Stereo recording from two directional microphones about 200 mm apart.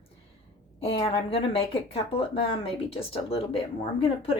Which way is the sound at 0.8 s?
30° left (ahead or behind).